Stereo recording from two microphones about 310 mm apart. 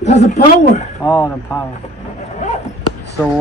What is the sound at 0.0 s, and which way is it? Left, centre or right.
Speech, left.